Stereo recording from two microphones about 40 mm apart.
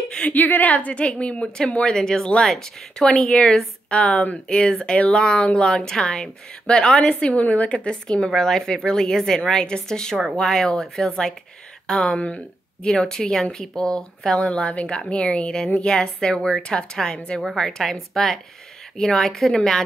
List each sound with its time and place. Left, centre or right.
0.2 s a woman's voice: left
1.9 s a woman's voice: centre
3.3 s speech: left
7.9 s a woman's voice: centre
12.2 s a woman's voice: left
12.8 s a woman's voice: centre